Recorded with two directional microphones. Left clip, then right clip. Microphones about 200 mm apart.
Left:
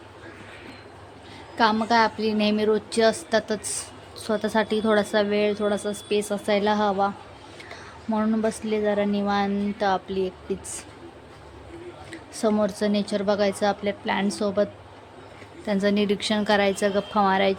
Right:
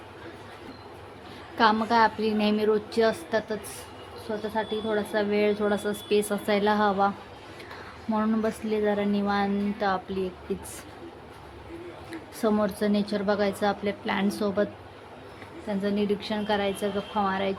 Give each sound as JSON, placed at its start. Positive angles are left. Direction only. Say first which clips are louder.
{"t": 1.5, "sound": "a woman's voice", "louder": "left 1 dB", "side_deg": 10}
{"t": 4.3, "sound": "speech", "louder": "left 6 dB", "side_deg": 35}
{"t": 5.1, "sound": "a woman's voice", "louder": "left 2 dB", "side_deg": 15}
{"t": 8.1, "sound": "a woman's voice", "louder": "left 2 dB", "side_deg": 10}
{"t": 12.4, "sound": "a woman's voice", "louder": "left 3 dB", "side_deg": 10}
{"t": 15.6, "sound": "a woman's voice", "louder": "left 5 dB", "side_deg": 30}